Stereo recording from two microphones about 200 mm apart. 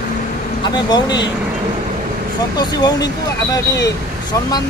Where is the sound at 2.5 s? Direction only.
20° left (ahead or behind).